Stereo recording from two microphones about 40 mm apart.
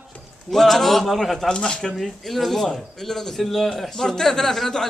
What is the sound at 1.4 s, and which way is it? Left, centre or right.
Speech, centre.